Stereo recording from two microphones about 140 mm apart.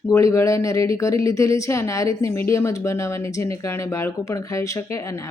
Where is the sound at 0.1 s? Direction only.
20° left (ahead or behind).